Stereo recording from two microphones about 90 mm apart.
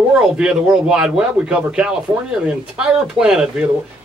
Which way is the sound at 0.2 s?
10° right (ahead or behind).